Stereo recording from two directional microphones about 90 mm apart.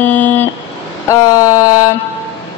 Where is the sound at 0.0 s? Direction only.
20° left (ahead or behind).